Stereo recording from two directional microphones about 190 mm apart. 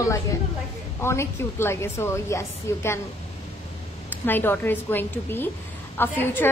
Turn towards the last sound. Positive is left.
turn(degrees=10)  # may be behind; listen again after turning